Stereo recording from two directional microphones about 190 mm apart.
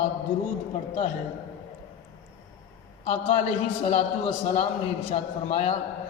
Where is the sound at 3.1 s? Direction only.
35° left (ahead or behind).